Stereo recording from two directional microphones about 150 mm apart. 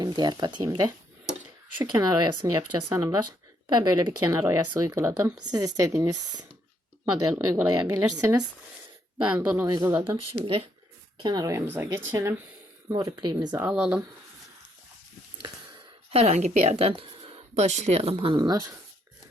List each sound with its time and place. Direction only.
0.0 s speech: 25° right (ahead or behind)
9.1 s speech: 5° right (ahead or behind)
9.6 s speech: 25° right (ahead or behind)
11.2 s speech: 25° right (ahead or behind)
13.6 s speech: 5° right (ahead or behind)
16.1 s speech: 45° right (ahead or behind); by 18.7 s 25° right (ahead or behind)